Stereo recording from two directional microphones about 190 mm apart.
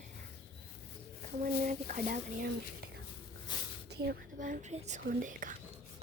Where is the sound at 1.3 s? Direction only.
40° right (ahead or behind).